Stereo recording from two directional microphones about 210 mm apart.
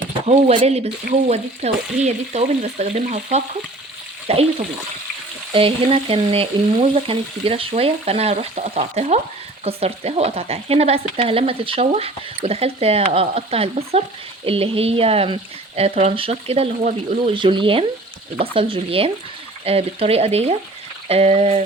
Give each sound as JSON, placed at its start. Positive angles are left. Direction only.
{"t": 0.3, "sound": "frying", "side_deg": -30}
{"t": 4.3, "sound": "speech", "side_deg": -30}
{"t": 5.5, "sound": "speech", "side_deg": -25}
{"t": 21.1, "sound": "frying", "side_deg": -30}